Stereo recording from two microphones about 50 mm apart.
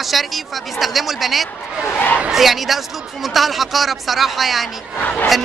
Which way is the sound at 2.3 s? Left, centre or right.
Centre.